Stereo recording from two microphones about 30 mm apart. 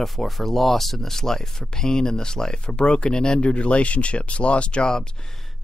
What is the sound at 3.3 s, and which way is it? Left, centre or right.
Speech, left.